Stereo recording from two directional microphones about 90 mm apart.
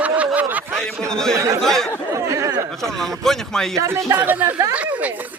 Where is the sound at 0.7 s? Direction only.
5° left (ahead or behind).